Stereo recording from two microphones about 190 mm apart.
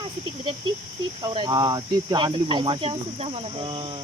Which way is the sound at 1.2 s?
20° right (ahead or behind).